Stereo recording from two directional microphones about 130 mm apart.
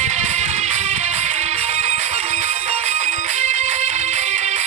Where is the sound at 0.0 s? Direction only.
60° right (ahead or behind).